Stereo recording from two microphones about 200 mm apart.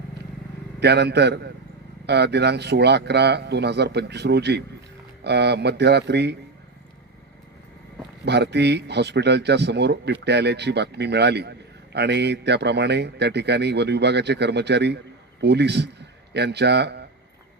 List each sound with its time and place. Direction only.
0.8 s a man's voice: 55° right (ahead or behind)
8.2 s a man's voice: 60° right (ahead or behind)